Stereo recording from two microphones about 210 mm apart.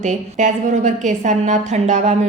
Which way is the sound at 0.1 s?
35° right (ahead or behind).